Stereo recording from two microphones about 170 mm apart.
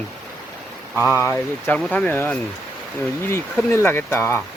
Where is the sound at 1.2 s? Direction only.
10° left (ahead or behind).